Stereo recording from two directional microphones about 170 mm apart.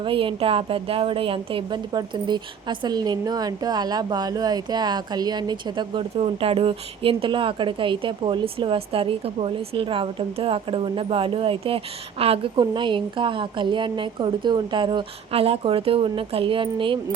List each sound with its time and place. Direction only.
0.0 s a woman's voice: 30° right (ahead or behind)